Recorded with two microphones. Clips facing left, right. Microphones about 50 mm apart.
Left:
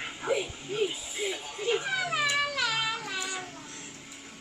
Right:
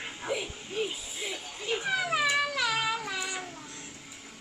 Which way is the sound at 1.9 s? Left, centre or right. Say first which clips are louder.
Right 1 dB; centre.